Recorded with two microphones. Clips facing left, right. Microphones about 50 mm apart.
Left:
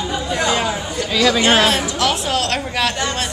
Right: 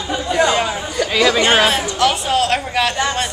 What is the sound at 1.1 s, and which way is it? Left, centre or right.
Speech, centre.